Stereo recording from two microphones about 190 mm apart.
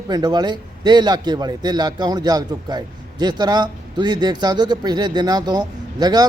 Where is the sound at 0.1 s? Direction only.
20° right (ahead or behind).